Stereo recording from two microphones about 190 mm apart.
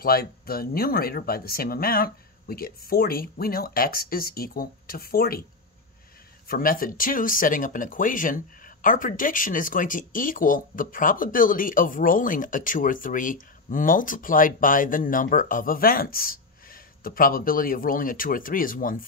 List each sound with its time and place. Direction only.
0.0 s speech: 50° left (ahead or behind)
6.4 s speech: 50° left (ahead or behind)